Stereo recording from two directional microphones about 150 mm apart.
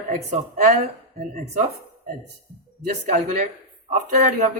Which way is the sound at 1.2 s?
80° right.